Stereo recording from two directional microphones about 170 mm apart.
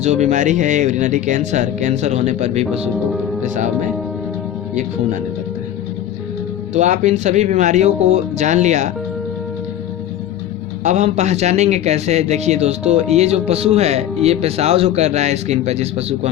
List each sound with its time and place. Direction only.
0.0 s speech: 40° right (ahead or behind)
4.7 s speech: 45° right (ahead or behind)
6.7 s speech: 45° right (ahead or behind)
10.8 s speech: 45° right (ahead or behind)